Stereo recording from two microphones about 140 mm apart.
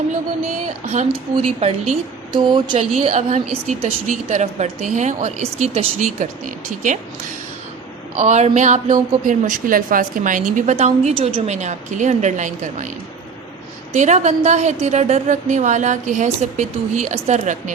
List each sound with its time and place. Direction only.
1.0 s a woman's voice: 40° right (ahead or behind)
2.3 s speech: 35° right (ahead or behind)
3.0 s a woman's voice: 50° right (ahead or behind)
8.2 s a woman's voice: 55° right (ahead or behind)
13.9 s a woman's voice: 55° right (ahead or behind)